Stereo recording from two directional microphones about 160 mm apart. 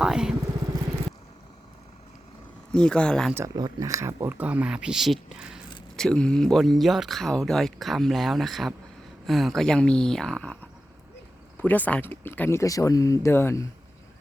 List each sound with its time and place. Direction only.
0.0 s speech: 5° right (ahead or behind)
2.7 s speech: 5° left (ahead or behind)
3.3 s speech: 20° right (ahead or behind); by 13.7 s 15° left (ahead or behind)